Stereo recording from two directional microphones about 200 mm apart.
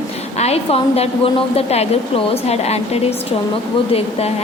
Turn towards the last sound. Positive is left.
turn(degrees=30)  # may be behind; listen again after turning